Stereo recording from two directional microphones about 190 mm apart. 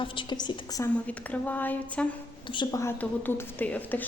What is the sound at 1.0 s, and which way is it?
A woman's voice, 10° left (ahead or behind).